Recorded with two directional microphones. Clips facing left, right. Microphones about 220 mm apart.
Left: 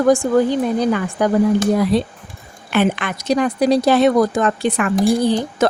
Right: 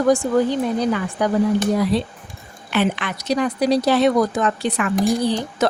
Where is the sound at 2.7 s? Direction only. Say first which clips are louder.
Left 3 dB; 50° left (ahead or behind).